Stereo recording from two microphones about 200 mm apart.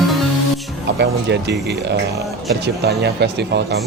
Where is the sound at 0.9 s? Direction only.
60° right (ahead or behind).